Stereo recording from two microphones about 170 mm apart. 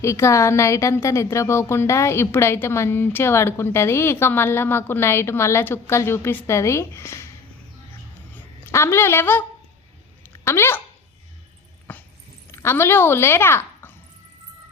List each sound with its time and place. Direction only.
0.0 s a woman's voice: 15° left (ahead or behind)
8.7 s a woman's voice: 15° left (ahead or behind)
11.9 s dog: 10° left (ahead or behind)
12.5 s speech: 15° left (ahead or behind)